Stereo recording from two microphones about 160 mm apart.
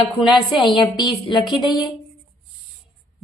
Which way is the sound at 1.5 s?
25° left (ahead or behind).